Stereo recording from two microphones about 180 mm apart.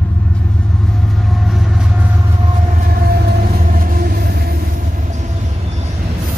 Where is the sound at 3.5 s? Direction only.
50° right (ahead or behind).